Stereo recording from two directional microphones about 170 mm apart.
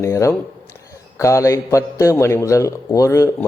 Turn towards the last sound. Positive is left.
turn(degrees=15)  # may be behind; listen again after turning